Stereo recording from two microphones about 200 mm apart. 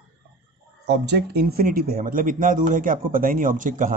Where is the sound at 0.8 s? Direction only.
55° right (ahead or behind).